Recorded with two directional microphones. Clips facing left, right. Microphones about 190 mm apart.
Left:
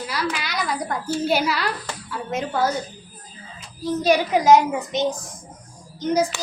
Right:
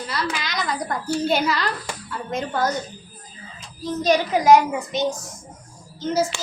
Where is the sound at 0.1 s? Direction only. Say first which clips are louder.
Even; 10° left (ahead or behind).